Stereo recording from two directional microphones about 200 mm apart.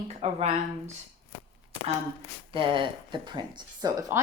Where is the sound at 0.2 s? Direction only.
30° right (ahead or behind).